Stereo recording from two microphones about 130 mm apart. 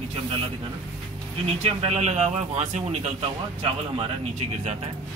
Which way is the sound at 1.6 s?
55° right (ahead or behind).